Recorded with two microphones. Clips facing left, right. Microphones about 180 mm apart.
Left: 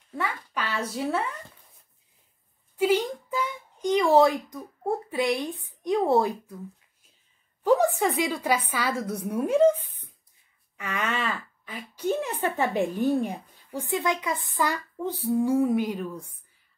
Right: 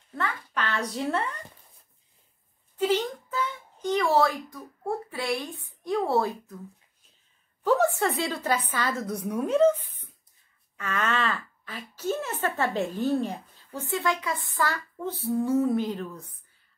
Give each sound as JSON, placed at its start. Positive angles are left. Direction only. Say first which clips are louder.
{"t": 0.1, "sound": "speech", "louder": "even", "side_deg": 10}
{"t": 2.8, "sound": "speech", "louder": "left 2 dB", "side_deg": 10}
{"t": 7.6, "sound": "a sound", "louder": "left 2 dB", "side_deg": 15}
{"t": 8.2, "sound": "speech", "louder": "left 2 dB", "side_deg": 10}